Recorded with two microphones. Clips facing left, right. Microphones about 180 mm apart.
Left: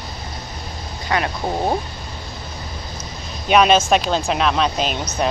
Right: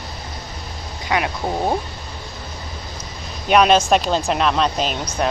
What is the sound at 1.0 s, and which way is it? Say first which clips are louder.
Speech: even; 10° right (ahead or behind).